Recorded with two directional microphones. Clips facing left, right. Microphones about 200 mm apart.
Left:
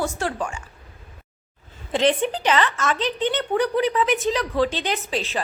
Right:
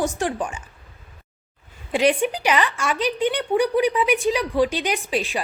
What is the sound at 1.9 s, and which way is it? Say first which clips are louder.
Speech: right 1 dB; 10° right (ahead or behind).